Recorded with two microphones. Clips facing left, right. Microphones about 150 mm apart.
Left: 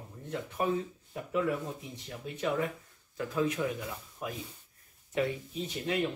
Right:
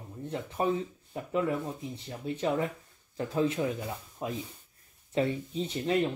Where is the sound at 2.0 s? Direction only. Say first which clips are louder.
Right 3 dB; 30° right (ahead or behind).